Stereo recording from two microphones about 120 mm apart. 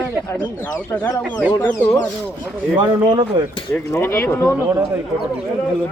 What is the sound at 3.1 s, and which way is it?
Speech, 40° right (ahead or behind).